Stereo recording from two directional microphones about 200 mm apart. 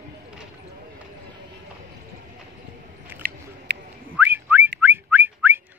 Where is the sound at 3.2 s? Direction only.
50° right (ahead or behind).